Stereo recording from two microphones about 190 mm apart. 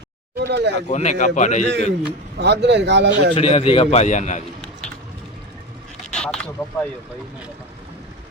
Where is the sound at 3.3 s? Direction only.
30° left (ahead or behind).